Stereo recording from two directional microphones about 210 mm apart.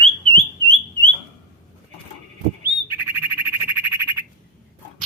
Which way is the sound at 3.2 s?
10° right (ahead or behind).